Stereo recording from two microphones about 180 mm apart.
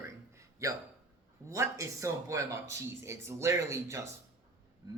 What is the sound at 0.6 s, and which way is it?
Speech, 20° right (ahead or behind).